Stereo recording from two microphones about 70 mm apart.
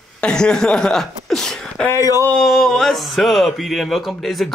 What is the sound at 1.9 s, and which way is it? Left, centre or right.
Speech, left.